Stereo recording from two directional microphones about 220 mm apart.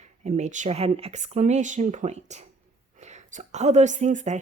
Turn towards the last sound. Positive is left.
turn(degrees=-35)  # may be behind; listen again after turning